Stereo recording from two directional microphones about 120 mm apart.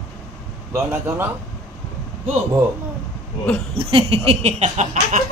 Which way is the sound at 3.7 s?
50° right (ahead or behind).